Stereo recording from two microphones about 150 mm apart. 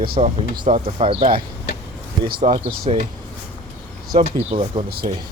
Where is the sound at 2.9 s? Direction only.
40° right (ahead or behind).